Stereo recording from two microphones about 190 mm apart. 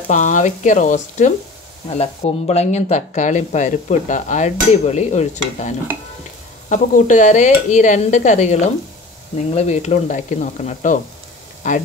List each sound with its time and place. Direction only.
0.1 s speech: 40° left (ahead or behind)